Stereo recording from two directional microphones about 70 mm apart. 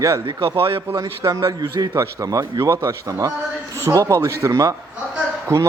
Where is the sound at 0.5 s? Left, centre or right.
Right.